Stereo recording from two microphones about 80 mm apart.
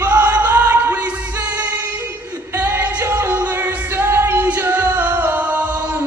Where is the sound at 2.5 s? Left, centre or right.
Right.